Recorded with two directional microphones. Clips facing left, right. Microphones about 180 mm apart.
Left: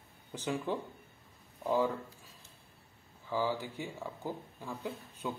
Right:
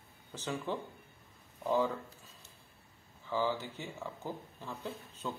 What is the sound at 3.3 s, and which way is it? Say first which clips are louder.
Speech: even; 10° left (ahead or behind).